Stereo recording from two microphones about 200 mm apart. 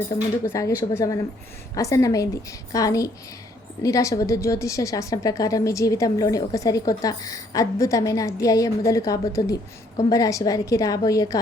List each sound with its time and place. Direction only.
0.1 s a woman's voice: 15° left (ahead or behind)